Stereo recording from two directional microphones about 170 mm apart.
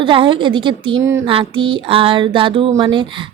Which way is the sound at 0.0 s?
30° right (ahead or behind).